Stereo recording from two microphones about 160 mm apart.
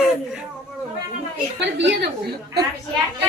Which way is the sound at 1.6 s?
90° right.